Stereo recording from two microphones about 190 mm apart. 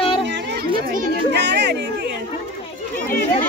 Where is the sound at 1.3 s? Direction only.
65° right (ahead or behind).